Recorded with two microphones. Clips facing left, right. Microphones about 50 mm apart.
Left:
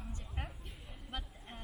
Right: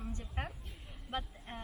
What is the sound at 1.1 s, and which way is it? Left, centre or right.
Speech, right.